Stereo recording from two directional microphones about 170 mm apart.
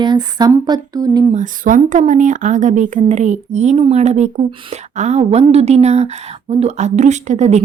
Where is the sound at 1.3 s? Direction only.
50° right (ahead or behind).